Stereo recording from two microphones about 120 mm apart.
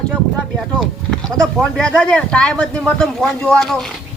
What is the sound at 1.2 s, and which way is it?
Speech, 5° left (ahead or behind).